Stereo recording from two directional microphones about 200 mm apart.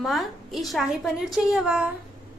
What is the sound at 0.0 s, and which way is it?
A woman's voice, centre (ahead or behind).